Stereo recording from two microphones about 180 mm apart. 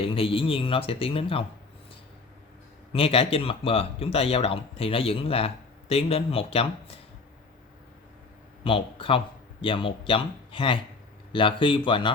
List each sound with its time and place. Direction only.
0.0 s speech: 30° left (ahead or behind)
2.9 s speech: 30° left (ahead or behind)
8.6 s speech: 30° left (ahead or behind)